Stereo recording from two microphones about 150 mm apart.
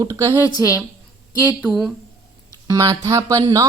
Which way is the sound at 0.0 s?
20° right (ahead or behind).